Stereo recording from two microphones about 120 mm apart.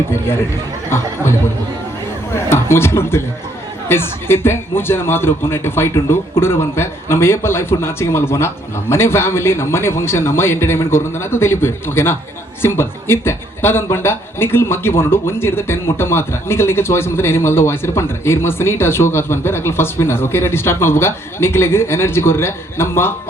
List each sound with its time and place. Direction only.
0.9 s a man's voice: 20° left (ahead or behind)